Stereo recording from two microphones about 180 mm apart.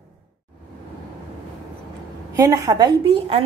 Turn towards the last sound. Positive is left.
turn(degrees=-30)  # may be behind; listen again after turning